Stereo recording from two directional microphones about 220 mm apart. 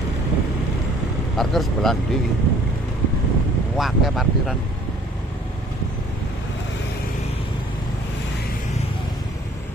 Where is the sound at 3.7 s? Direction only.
Centre (ahead or behind).